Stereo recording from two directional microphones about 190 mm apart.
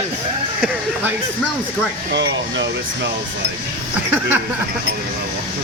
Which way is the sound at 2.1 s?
65° right (ahead or behind).